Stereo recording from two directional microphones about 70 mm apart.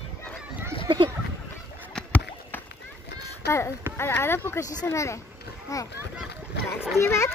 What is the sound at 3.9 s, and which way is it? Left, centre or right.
Speech, left.